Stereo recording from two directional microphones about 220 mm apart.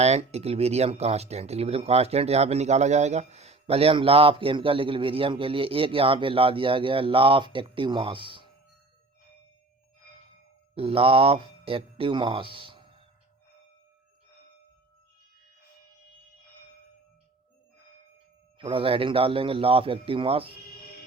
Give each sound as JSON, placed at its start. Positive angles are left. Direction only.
{"t": 0.0, "sound": "speech", "side_deg": -30}
{"t": 10.8, "sound": "speech", "side_deg": -25}
{"t": 18.5, "sound": "speech", "side_deg": -25}